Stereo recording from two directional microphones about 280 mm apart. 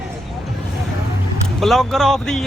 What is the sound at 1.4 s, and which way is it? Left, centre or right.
Speech, centre.